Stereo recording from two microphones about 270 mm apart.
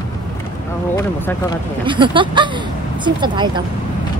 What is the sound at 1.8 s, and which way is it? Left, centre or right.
Speech, centre.